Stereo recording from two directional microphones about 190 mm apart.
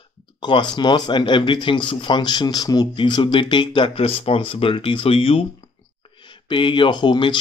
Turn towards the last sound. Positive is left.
turn(degrees=25)  # may be behind; listen again after turning